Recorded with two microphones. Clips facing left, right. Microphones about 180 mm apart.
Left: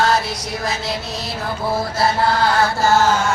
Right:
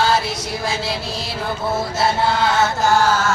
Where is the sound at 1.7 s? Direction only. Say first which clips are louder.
Left 1 dB; 25° right (ahead or behind).